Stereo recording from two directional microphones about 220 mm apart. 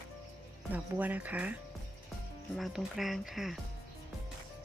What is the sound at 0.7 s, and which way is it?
Speech, 5° right (ahead or behind).